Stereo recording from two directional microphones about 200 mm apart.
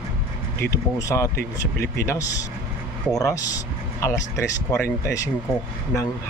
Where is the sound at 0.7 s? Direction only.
15° left (ahead or behind).